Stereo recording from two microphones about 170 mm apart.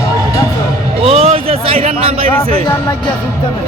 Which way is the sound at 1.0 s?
35° right (ahead or behind).